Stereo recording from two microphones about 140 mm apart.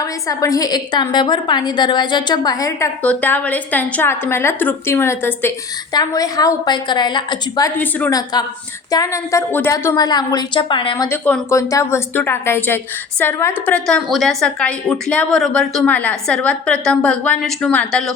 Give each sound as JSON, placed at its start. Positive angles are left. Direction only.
{"t": 0.0, "sound": "a woman's voice", "side_deg": 25}
{"t": 3.0, "sound": "a woman's voice", "side_deg": 10}
{"t": 7.8, "sound": "a woman's voice", "side_deg": 10}
{"t": 8.1, "sound": "a woman's voice", "side_deg": 30}
{"t": 10.9, "sound": "a woman's voice", "side_deg": 20}